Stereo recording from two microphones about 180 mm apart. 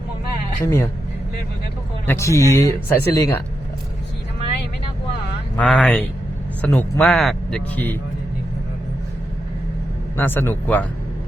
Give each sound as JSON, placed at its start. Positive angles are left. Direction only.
{"t": 0.6, "sound": "speech", "side_deg": 15}
{"t": 2.0, "sound": "speech", "side_deg": 15}
{"t": 5.5, "sound": "speech", "side_deg": 5}
{"t": 10.2, "sound": "speech", "side_deg": 10}